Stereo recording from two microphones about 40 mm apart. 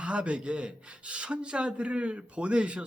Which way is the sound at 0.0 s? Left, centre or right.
Right.